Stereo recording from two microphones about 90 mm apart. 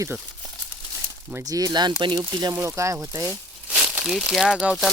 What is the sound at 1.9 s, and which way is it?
Speech, 75° right (ahead or behind).